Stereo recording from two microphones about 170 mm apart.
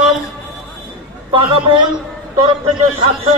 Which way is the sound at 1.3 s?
30° right (ahead or behind).